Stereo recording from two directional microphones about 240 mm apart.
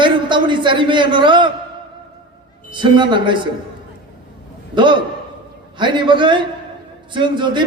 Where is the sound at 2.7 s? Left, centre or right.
Centre.